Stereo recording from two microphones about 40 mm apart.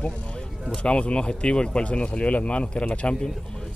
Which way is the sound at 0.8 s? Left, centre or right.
Left.